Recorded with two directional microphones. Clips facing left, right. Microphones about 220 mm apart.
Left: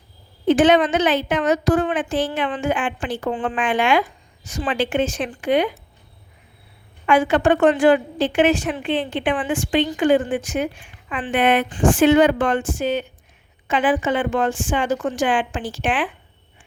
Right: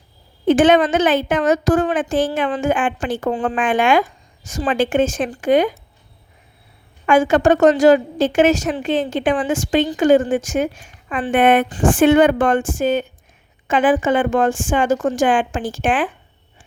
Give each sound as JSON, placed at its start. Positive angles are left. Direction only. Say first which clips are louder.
{"t": 0.4, "sound": "a woman's voice", "louder": "right 2 dB", "side_deg": -50}
{"t": 7.0, "sound": "a woman's voice", "louder": "right 3 dB", "side_deg": -45}